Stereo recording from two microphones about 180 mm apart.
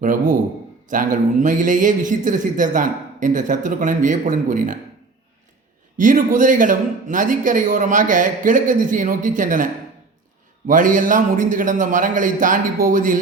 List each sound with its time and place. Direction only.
0.0 s a man's voice: 50° right (ahead or behind)
6.0 s a man's voice: 45° right (ahead or behind)
10.7 s a man's voice: 45° right (ahead or behind)